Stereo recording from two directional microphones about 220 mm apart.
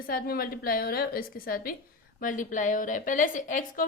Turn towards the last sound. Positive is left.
turn(degrees=35)  # may be behind; listen again after turning